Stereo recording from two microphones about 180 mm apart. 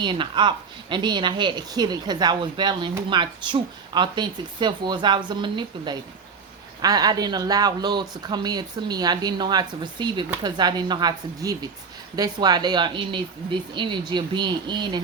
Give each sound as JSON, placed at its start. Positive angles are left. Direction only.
{"t": 0.0, "sound": "a woman's voice", "side_deg": -25}